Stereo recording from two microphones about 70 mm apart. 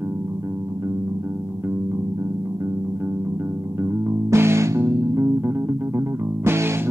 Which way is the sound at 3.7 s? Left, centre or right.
Right.